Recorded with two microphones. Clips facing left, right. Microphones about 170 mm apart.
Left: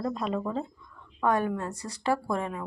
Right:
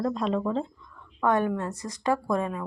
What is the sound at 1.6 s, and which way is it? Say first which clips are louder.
Speech: right 2 dB; 35° left (ahead or behind).